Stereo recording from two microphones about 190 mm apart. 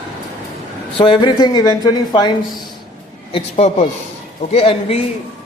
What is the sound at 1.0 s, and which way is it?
A man's voice, 25° left (ahead or behind).